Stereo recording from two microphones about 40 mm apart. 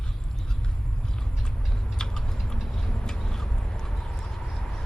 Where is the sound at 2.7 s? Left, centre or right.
Centre.